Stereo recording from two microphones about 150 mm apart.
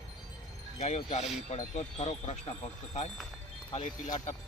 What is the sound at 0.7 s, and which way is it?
Speech, 50° left (ahead or behind).